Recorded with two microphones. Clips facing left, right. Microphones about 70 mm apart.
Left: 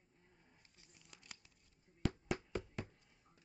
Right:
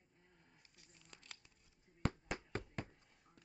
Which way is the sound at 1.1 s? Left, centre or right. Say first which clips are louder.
Even; centre.